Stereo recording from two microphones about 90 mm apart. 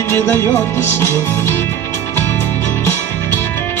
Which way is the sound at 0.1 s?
20° left (ahead or behind).